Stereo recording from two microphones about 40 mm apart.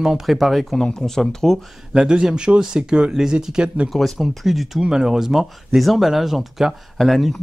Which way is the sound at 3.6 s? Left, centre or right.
Right.